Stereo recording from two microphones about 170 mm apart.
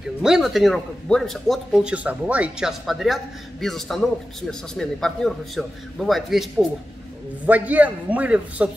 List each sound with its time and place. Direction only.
0.2 s a man's voice: centre (ahead or behind)